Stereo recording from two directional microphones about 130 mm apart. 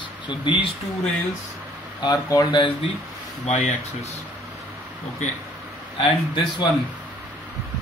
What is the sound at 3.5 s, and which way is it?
Speech, 65° left (ahead or behind).